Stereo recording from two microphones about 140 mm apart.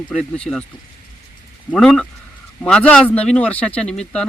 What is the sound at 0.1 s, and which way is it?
Speech, 5° left (ahead or behind).